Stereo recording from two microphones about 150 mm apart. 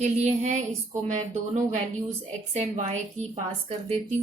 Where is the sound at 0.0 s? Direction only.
50° right (ahead or behind).